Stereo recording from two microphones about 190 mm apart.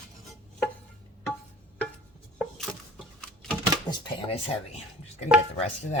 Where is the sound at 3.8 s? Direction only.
35° left (ahead or behind).